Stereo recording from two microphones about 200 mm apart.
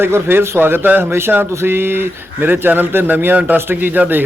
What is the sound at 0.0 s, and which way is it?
Speech, 10° right (ahead or behind).